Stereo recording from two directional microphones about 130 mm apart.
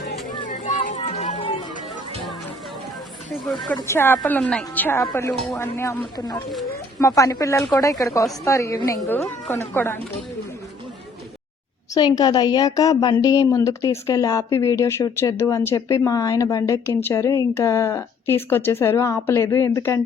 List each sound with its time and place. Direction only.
0.4 s children playing: 75° left (ahead or behind); by 1.5 s 50° left (ahead or behind)
3.8 s a woman's voice: 15° left (ahead or behind)
6.1 s a woman's voice: 30° left (ahead or behind)
11.9 s a woman's voice: 30° left (ahead or behind)